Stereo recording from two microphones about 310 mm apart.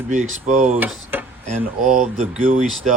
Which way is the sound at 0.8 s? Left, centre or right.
Centre.